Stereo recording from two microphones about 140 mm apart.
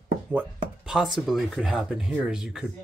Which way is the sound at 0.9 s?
Centre (ahead or behind).